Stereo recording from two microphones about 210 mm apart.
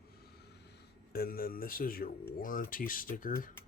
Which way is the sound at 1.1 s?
45° left (ahead or behind).